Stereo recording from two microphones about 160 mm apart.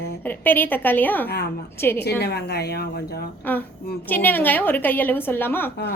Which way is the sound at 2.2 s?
90° left.